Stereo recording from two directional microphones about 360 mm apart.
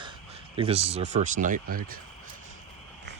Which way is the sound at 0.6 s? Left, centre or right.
Centre.